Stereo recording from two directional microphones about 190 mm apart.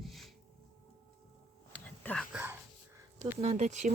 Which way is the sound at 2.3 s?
10° right (ahead or behind).